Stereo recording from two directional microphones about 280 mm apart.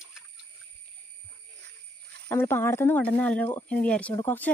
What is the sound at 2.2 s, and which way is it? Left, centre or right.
Speech, centre.